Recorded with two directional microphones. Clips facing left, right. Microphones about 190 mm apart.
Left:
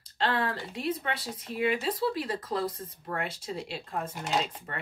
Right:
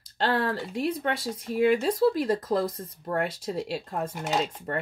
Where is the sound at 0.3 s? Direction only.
45° right (ahead or behind).